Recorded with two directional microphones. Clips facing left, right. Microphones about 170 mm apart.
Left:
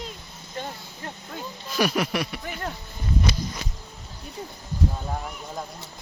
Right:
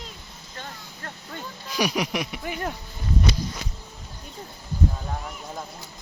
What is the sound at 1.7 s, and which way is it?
Speech, 15° right (ahead or behind).